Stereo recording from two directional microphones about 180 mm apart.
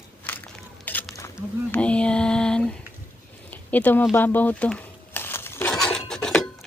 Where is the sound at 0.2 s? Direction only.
10° left (ahead or behind).